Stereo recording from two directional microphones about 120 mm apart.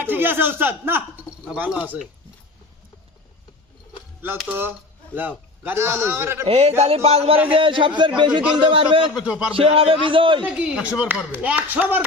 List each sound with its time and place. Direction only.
0.0 s speech: 15° right (ahead or behind)
5.1 s a man's voice: 15° right (ahead or behind)
6.4 s a man's voice: 55° right (ahead or behind)
7.5 s a man's voice: 45° right (ahead or behind)
9.1 s speech: 5° right (ahead or behind)
9.6 s a man's voice: 50° right (ahead or behind)
10.4 s speech: 10° right (ahead or behind)